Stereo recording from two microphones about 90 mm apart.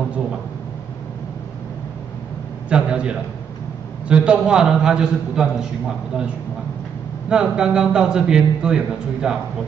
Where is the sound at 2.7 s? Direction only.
10° right (ahead or behind).